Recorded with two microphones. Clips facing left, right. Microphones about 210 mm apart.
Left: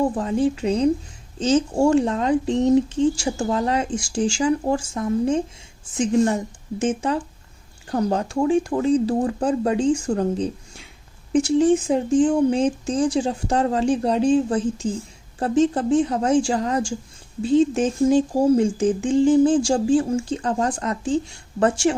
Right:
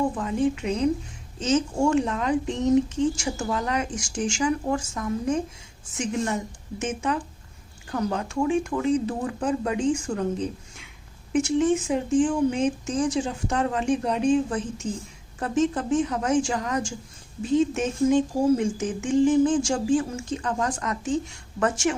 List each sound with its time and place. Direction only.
0.2 s speech: 30° left (ahead or behind)